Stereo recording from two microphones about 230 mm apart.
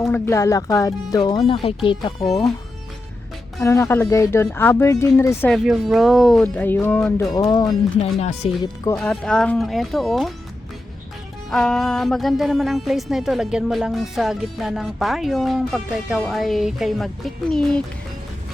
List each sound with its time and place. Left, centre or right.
0.0 s speech: centre
3.6 s speech: centre
5.5 s speech: centre; by 8.7 s left
9.0 s speech: centre
11.5 s speech: centre